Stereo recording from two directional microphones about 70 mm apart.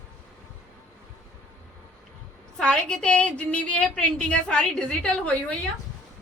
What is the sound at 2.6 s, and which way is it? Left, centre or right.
A woman's voice, centre.